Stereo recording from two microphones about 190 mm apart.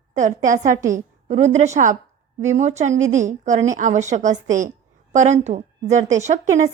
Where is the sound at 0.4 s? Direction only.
40° right (ahead or behind).